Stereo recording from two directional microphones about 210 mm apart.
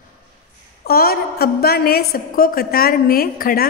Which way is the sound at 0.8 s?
45° left (ahead or behind).